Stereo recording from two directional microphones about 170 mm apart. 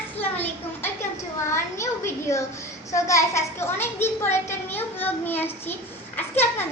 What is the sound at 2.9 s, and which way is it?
A child's voice, 20° left (ahead or behind).